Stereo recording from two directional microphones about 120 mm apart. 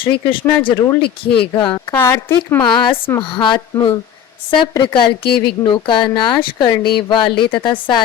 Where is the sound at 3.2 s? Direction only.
45° left (ahead or behind).